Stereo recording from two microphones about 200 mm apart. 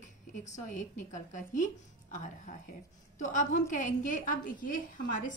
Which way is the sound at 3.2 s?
40° left (ahead or behind).